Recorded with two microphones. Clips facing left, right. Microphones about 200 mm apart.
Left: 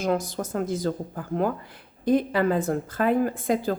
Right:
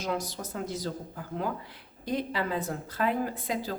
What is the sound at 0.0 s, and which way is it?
Speech, 50° left (ahead or behind).